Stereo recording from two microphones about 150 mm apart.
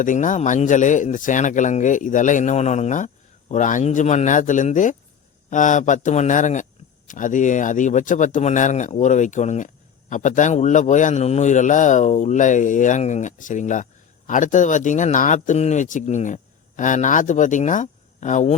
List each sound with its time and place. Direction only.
0.0 s speech: 60° left (ahead or behind)